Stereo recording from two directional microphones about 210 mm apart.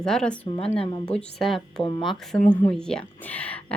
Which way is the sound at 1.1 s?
5° left (ahead or behind).